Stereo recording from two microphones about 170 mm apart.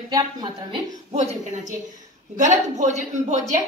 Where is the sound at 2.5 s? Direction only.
45° right (ahead or behind).